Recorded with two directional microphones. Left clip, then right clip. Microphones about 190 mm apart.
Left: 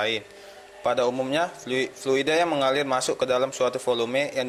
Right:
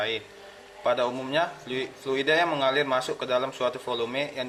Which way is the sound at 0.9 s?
40° left (ahead or behind).